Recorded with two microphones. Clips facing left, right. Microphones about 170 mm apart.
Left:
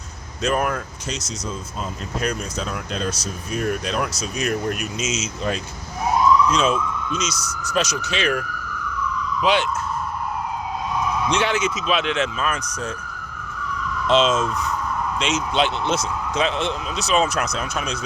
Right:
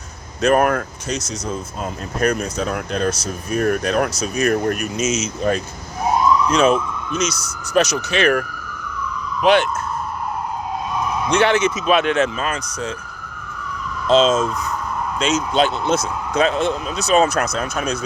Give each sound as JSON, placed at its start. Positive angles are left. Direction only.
{"t": 0.4, "sound": "speech", "side_deg": -60}
{"t": 11.3, "sound": "speech", "side_deg": -55}
{"t": 14.1, "sound": "speech", "side_deg": -40}